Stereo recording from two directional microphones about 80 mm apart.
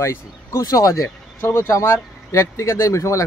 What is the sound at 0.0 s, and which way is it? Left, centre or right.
Speech, left.